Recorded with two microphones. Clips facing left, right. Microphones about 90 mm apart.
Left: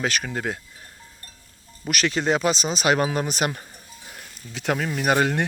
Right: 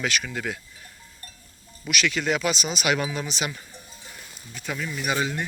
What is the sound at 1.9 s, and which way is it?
Speech, 40° left (ahead or behind).